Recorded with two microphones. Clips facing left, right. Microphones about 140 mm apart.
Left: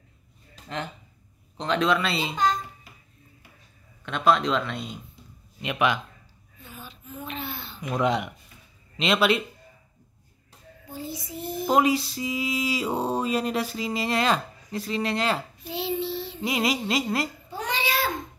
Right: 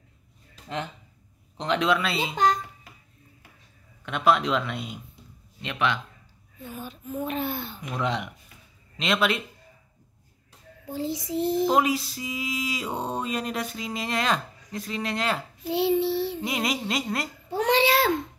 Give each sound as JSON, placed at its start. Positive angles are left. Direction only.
{"t": 1.6, "sound": "speech", "side_deg": -10}
{"t": 4.0, "sound": "speech", "side_deg": -10}
{"t": 5.6, "sound": "speech", "side_deg": 10}
{"t": 6.6, "sound": "speech", "side_deg": -45}
{"t": 7.9, "sound": "speech", "side_deg": 10}
{"t": 8.9, "sound": "mantra", "side_deg": 5}
{"t": 10.9, "sound": "child singing", "side_deg": -90}
{"t": 11.6, "sound": "mantra", "side_deg": 0}
{"t": 15.7, "sound": "child singing", "side_deg": -65}
{"t": 16.3, "sound": "mantra", "side_deg": 0}
{"t": 17.5, "sound": "a sound", "side_deg": -75}